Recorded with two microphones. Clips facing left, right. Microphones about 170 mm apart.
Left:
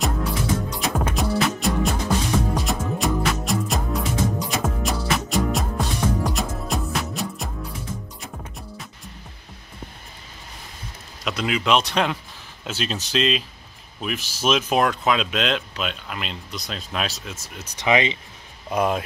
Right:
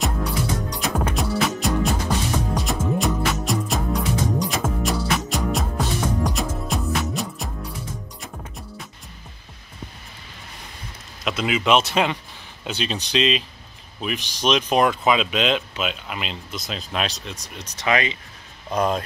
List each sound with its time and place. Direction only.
0.0 s music: centre (ahead or behind)
11.2 s speech: centre (ahead or behind)
17.7 s speech: 20° left (ahead or behind)
18.7 s speech: 5° left (ahead or behind)